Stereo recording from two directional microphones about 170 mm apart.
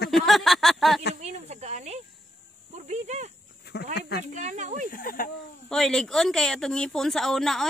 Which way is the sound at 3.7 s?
70° left (ahead or behind).